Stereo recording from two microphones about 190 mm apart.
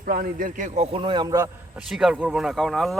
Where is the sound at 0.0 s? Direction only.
45° right (ahead or behind).